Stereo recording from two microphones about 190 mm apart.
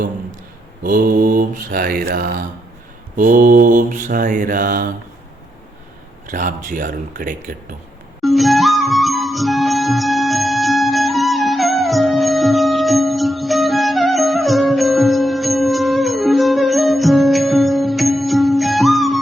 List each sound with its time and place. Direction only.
0.8 s mantra: 45° right (ahead or behind)
6.3 s mantra: 45° right (ahead or behind)
8.2 s music: centre (ahead or behind)